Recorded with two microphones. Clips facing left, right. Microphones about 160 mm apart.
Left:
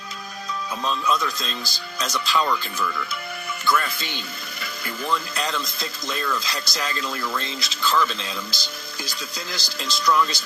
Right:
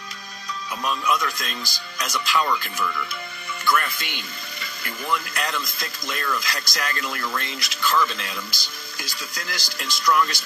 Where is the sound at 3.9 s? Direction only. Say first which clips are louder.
Left 2 dB; 30° left (ahead or behind).